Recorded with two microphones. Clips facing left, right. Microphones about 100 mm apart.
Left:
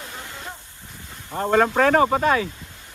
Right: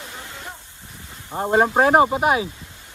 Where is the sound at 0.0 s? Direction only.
20° right (ahead or behind).